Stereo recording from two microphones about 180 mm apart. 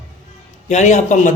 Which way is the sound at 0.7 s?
40° left (ahead or behind).